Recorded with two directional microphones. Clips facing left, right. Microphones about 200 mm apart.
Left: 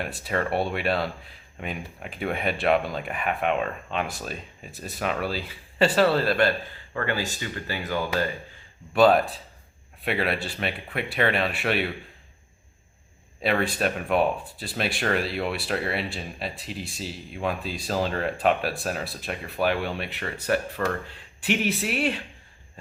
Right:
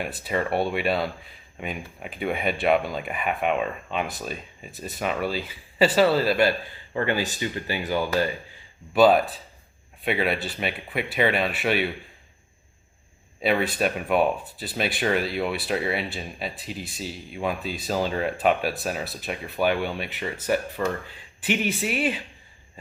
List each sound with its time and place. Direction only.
0.0 s speech: centre (ahead or behind)
6.9 s speech: 20° right (ahead or behind)
8.9 s speech: centre (ahead or behind)
13.4 s speech: 5° right (ahead or behind)